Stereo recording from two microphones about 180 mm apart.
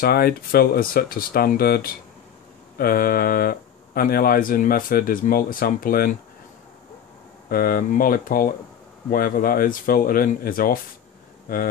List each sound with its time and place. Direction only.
0.0 s speech: 55° left (ahead or behind)
7.4 s speech: 55° left (ahead or behind)